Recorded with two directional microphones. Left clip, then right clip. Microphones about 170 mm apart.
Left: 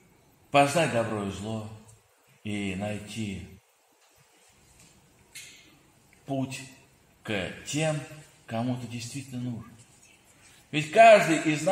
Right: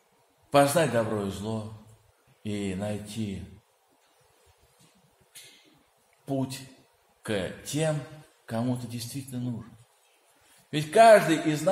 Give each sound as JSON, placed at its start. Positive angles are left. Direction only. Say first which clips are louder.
{"t": 0.5, "sound": "a man's voice", "louder": "right 1 dB", "side_deg": -20}
{"t": 6.2, "sound": "a man's voice", "louder": "right 1 dB", "side_deg": -25}
{"t": 10.7, "sound": "a man's voice", "louder": "even", "side_deg": -20}